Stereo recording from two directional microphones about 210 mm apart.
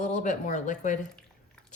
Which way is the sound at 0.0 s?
35° left (ahead or behind).